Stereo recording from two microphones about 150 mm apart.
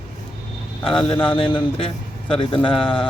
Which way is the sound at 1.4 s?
35° left (ahead or behind).